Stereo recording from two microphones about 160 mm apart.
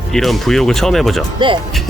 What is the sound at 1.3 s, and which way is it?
Speech, 30° right (ahead or behind).